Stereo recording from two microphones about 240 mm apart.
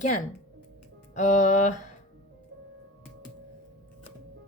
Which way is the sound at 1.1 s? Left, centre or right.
Left.